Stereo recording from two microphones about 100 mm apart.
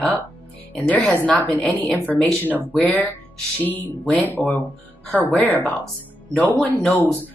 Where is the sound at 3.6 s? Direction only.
20° left (ahead or behind).